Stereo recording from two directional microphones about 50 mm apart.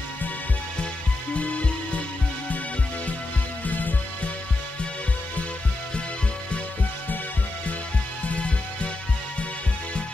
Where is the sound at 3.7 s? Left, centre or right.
Left.